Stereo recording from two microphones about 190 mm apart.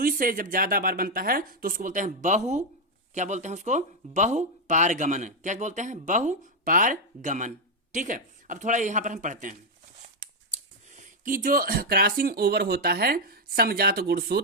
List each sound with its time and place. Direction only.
0.0 s speech: 50° right (ahead or behind)